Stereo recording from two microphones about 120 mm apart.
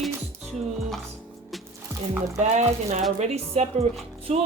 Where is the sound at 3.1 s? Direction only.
65° right (ahead or behind).